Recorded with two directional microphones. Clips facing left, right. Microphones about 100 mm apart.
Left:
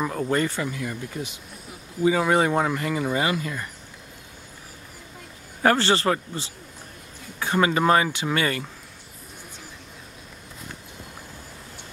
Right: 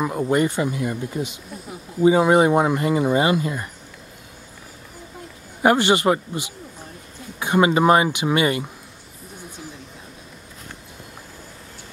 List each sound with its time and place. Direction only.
0.0 s speech: 15° right (ahead or behind)
5.6 s speech: 15° right (ahead or behind)